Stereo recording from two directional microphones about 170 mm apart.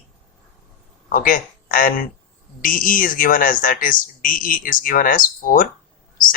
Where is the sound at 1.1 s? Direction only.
55° left (ahead or behind).